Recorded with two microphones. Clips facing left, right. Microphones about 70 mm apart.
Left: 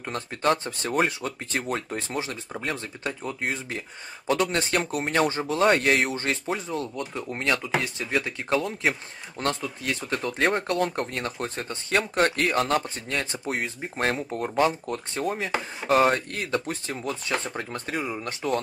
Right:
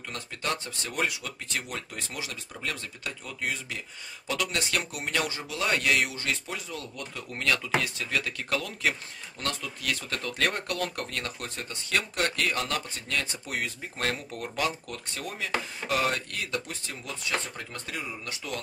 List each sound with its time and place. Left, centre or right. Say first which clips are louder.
0.1 s speech: left 8 dB; left